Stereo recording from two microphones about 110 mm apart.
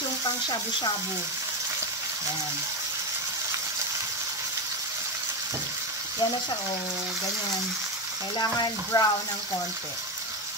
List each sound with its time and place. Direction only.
8.4 s frying: 35° left (ahead or behind)